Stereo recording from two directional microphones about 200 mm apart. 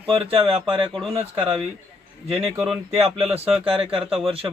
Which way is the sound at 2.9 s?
30° right (ahead or behind).